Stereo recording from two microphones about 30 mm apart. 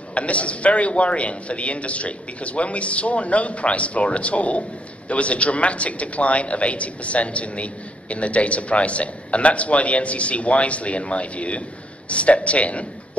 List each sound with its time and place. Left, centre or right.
0.1 s a man's voice: left